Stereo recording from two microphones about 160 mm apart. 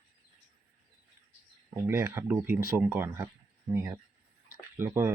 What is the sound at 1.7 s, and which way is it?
Speech, 15° right (ahead or behind).